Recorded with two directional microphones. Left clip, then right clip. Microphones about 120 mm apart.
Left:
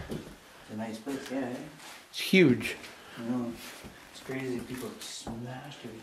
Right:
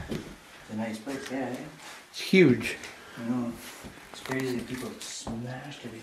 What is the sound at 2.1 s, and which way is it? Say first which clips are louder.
Speech: right 2 dB; 10° left (ahead or behind).